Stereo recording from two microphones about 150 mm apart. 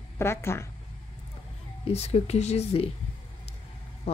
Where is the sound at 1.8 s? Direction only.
45° left (ahead or behind).